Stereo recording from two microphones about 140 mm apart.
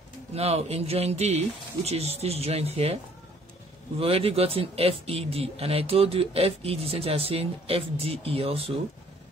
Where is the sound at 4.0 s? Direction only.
45° right (ahead or behind).